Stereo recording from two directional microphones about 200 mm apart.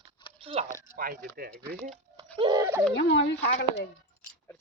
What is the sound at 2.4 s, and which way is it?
Speech, 20° right (ahead or behind).